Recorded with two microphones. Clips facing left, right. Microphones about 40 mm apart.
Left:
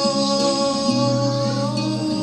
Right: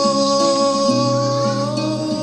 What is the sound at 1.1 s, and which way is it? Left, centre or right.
Music, right.